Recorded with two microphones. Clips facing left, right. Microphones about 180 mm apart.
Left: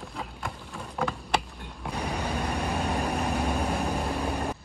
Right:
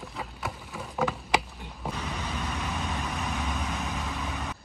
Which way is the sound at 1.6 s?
5° right (ahead or behind).